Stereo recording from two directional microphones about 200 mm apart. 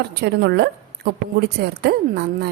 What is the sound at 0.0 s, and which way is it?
A woman's voice, 55° right (ahead or behind).